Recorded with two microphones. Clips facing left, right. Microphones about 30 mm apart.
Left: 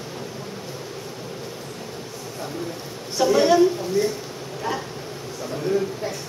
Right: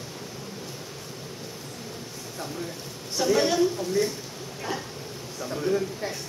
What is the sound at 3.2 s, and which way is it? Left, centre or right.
Speech, centre.